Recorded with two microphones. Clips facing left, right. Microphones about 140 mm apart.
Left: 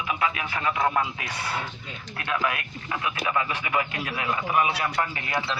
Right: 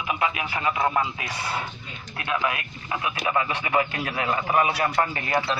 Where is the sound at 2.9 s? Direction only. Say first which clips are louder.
Right 2 dB; 20° right (ahead or behind); by 5.2 s 45° right (ahead or behind).